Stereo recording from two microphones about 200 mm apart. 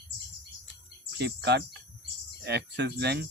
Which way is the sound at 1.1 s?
55° right (ahead or behind).